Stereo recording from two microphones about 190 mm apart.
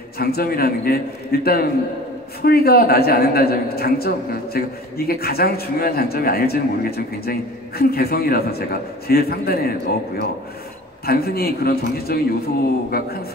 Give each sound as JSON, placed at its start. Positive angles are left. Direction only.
{"t": 0.2, "sound": "a man's voice", "side_deg": 50}
{"t": 11.1, "sound": "a man's voice", "side_deg": 55}